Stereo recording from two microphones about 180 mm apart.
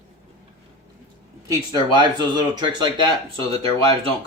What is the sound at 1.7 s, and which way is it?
Speech, 25° right (ahead or behind).